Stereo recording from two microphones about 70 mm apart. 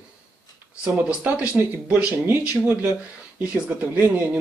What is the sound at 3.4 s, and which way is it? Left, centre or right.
Speech, right.